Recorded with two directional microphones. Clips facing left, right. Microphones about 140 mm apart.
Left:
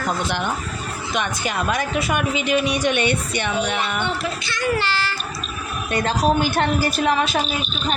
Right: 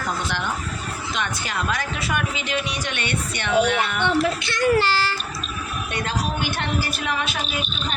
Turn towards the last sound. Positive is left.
turn(degrees=40)  # may be behind; listen again after turning